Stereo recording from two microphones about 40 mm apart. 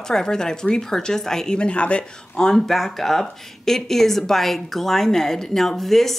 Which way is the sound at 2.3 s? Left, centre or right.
Centre.